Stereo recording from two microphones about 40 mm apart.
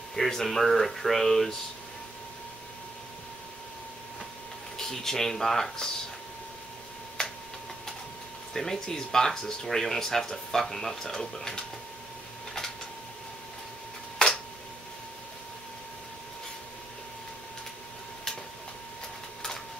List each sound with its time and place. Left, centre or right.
0.1 s speech: centre
4.7 s speech: centre
8.5 s speech: centre
14.1 s tick-tock: centre